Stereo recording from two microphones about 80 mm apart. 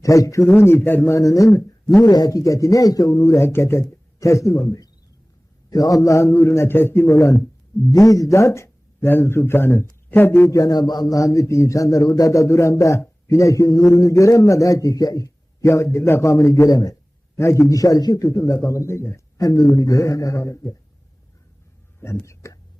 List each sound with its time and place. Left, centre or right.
0.0 s a man's voice: left
0.5 s a man's voice: left
1.1 s a man's voice: left
2.0 s a man's voice: left
10.5 s speech: left
11.2 s a man's voice: left
15.6 s a man's voice: left
17.3 s a man's voice: left
22.0 s speech: left
22.4 s whispering: left